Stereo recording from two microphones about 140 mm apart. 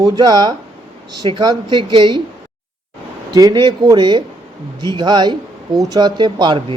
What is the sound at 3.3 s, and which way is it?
Speech, 30° right (ahead or behind).